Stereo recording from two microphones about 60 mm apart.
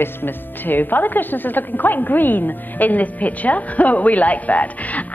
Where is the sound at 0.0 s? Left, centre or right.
Left.